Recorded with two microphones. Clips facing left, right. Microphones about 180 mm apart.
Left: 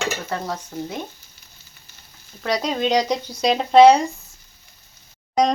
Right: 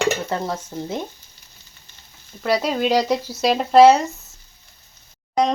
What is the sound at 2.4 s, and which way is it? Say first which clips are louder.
Speech: right 2 dB; 5° right (ahead or behind).